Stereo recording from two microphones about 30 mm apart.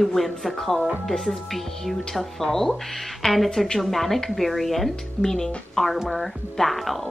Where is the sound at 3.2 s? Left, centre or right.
Centre.